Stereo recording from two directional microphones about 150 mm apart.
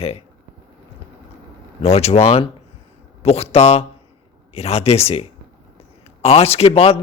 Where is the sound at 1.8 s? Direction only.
45° left (ahead or behind).